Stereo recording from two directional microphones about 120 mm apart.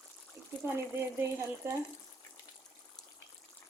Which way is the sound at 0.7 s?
20° right (ahead or behind).